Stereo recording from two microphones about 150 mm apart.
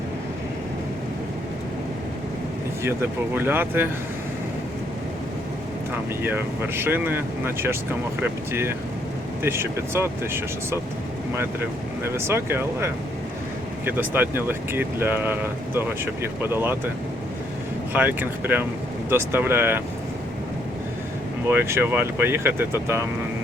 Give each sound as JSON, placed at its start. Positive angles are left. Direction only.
{"t": 2.8, "sound": "speech", "side_deg": -15}
{"t": 6.2, "sound": "speech", "side_deg": -15}
{"t": 17.9, "sound": "speech", "side_deg": -10}
{"t": 21.4, "sound": "speech", "side_deg": -15}